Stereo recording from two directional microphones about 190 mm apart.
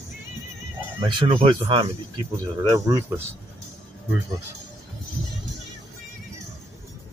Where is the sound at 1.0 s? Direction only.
25° right (ahead or behind).